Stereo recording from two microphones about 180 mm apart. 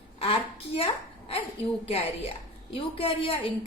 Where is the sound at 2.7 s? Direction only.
30° left (ahead or behind).